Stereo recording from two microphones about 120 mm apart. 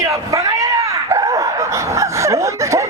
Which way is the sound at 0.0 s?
25° right (ahead or behind).